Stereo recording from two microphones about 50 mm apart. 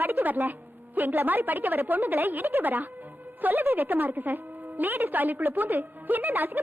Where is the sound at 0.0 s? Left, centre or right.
Right.